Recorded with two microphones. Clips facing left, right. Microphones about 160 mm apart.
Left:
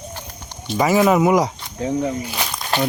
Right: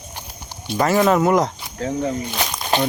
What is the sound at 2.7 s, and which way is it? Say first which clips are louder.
Speech: right 1 dB; 20° right (ahead or behind).